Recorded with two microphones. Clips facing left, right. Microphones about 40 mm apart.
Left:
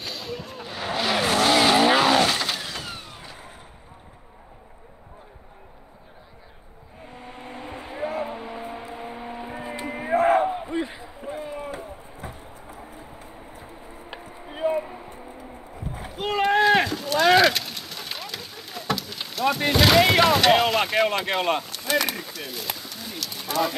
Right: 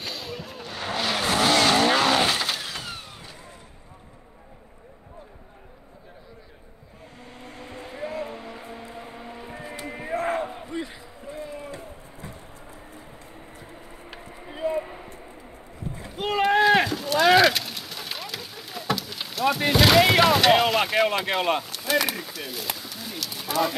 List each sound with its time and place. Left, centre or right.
0.0 s vehicle: centre
7.2 s vehicle: left
16.1 s a sound: centre